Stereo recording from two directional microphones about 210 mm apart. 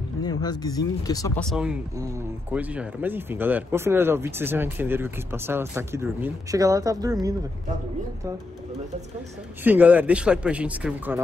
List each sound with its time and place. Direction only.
0.2 s speech: 20° left (ahead or behind)
1.4 s speech: centre (ahead or behind)
9.6 s speech: 10° right (ahead or behind)